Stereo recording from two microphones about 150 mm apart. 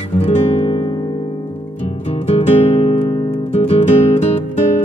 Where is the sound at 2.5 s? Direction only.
45° left (ahead or behind).